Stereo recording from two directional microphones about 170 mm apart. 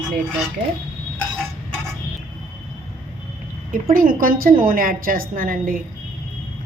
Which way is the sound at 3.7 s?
55° right (ahead or behind).